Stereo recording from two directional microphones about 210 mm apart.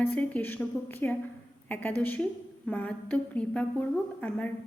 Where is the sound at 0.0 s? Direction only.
5° left (ahead or behind).